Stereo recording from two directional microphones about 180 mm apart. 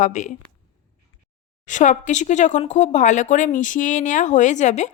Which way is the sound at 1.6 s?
45° left (ahead or behind).